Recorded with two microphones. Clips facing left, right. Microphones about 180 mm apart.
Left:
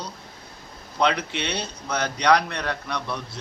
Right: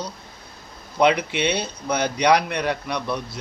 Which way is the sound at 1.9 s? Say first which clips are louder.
Right 2 dB; 15° right (ahead or behind).